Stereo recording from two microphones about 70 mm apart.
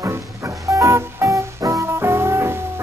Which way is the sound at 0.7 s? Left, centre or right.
Right.